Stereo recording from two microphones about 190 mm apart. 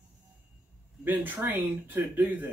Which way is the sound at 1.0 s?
10° right (ahead or behind).